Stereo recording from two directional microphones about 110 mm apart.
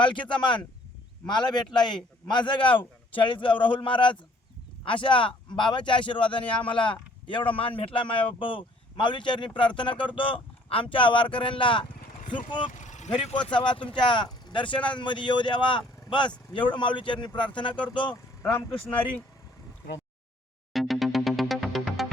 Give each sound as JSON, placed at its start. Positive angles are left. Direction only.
{"t": 0.0, "sound": "speech", "side_deg": 45}
{"t": 12.8, "sound": "vehicle", "side_deg": 90}
{"t": 13.4, "sound": "speech", "side_deg": 45}
{"t": 20.7, "sound": "music", "side_deg": 0}